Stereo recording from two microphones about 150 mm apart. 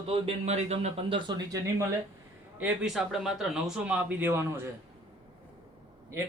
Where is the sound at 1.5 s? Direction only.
20° right (ahead or behind).